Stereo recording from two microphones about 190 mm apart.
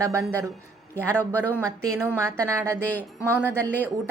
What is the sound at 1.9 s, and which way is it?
Speech, 15° right (ahead or behind).